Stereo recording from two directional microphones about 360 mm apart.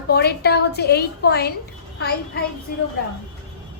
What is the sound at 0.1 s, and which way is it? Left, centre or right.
A woman's voice, left.